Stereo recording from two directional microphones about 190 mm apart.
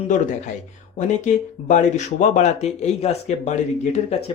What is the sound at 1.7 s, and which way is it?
Speech, 40° left (ahead or behind).